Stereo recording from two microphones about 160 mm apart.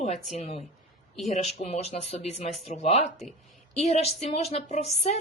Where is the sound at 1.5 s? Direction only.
40° left (ahead or behind).